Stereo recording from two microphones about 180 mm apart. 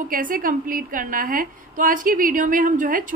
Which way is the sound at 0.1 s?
50° right (ahead or behind).